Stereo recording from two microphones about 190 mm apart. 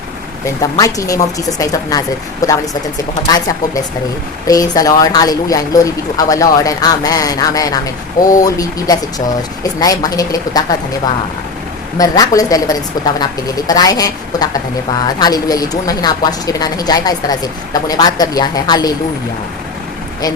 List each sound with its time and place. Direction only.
0.6 s a woman's voice: 20° left (ahead or behind)
4.4 s a woman's voice: 20° left (ahead or behind)